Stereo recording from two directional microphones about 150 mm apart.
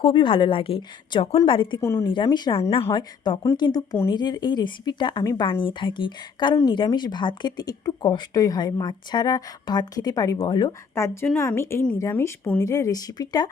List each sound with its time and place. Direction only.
0.0 s a woman's voice: 35° left (ahead or behind)
1.8 s speech: 15° left (ahead or behind)
2.0 s a woman's voice: 35° left (ahead or behind)
2.9 s a woman's voice: 30° left (ahead or behind)